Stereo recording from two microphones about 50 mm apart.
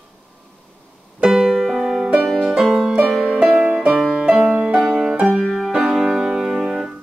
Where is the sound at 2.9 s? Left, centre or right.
Centre.